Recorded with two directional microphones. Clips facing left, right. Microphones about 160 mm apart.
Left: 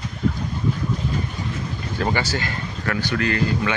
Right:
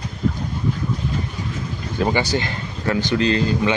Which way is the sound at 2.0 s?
15° right (ahead or behind).